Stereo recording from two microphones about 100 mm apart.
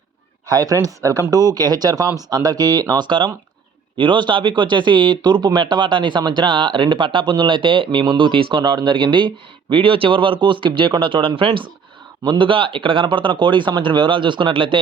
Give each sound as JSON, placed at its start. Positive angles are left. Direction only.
{"t": 0.4, "sound": "speech", "side_deg": -35}